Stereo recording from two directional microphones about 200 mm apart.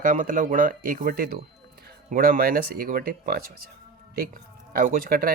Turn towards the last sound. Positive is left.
turn(degrees=-45)  # may be behind; listen again after turning